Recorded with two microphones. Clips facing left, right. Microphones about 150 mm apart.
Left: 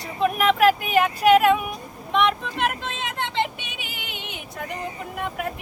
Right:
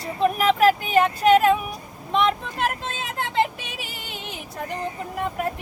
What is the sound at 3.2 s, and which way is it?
Vehicle, 5° right (ahead or behind).